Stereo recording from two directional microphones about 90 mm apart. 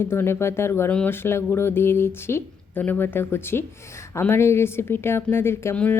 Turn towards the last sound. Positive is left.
turn(degrees=15)  # may be behind; listen again after turning